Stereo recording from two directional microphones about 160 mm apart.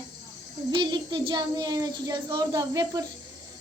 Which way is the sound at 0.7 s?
30° right (ahead or behind).